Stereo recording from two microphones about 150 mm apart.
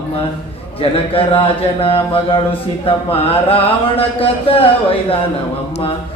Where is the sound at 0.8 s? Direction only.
35° left (ahead or behind).